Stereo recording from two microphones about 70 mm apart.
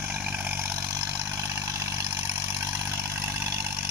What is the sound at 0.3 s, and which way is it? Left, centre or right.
Vehicle, right.